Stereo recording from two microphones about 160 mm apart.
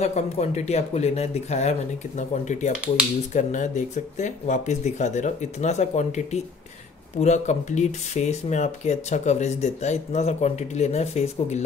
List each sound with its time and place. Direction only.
0.0 s speech: 45° left (ahead or behind)